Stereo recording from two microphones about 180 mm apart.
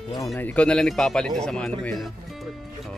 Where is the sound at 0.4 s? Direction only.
10° left (ahead or behind).